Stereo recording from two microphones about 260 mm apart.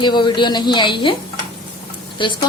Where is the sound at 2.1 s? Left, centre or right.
Centre.